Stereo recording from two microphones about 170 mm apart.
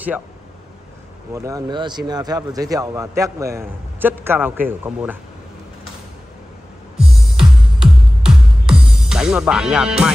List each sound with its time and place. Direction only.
1.3 s speech: 20° right (ahead or behind)
7.0 s music: centre (ahead or behind)